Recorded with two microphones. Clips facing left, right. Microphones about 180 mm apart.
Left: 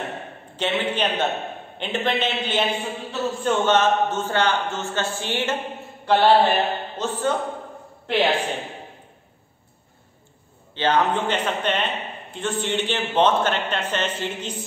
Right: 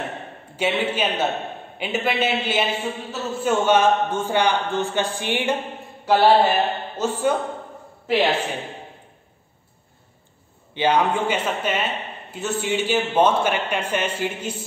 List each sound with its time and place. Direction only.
0.6 s a man's voice: 10° right (ahead or behind)
10.7 s a man's voice: 10° right (ahead or behind)